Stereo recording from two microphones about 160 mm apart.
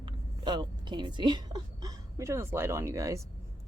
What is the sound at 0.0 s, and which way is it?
A woman's voice, 30° right (ahead or behind).